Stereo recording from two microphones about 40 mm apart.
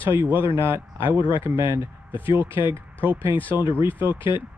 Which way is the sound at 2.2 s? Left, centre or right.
Right.